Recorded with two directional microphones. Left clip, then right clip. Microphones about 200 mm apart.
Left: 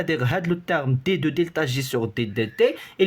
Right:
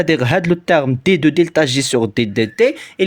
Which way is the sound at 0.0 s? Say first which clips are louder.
Right 9 dB; 35° right (ahead or behind).